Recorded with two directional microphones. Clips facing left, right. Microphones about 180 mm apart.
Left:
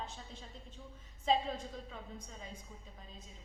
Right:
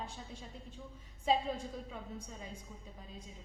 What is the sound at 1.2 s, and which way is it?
A woman's voice, 10° right (ahead or behind).